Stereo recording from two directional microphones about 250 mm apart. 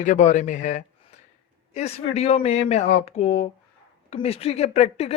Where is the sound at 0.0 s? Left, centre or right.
Left.